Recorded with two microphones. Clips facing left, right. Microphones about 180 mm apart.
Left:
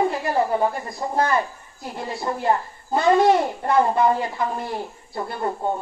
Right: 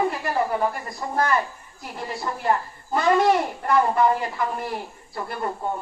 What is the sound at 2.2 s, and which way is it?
A child's voice, 25° left (ahead or behind).